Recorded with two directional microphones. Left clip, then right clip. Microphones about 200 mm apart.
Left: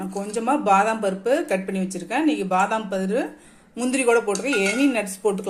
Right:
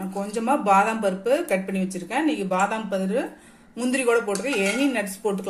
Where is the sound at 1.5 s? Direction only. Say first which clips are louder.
Even; 20° left (ahead or behind).